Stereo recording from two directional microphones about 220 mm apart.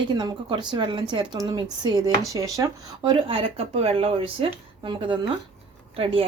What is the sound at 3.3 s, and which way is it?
Speech, 25° right (ahead or behind).